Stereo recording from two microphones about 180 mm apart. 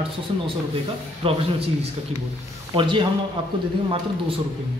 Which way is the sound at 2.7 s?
25° right (ahead or behind).